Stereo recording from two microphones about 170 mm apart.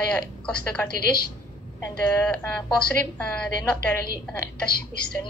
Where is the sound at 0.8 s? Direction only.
65° left (ahead or behind).